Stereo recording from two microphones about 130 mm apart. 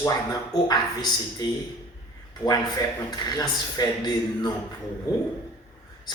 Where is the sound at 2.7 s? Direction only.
30° left (ahead or behind).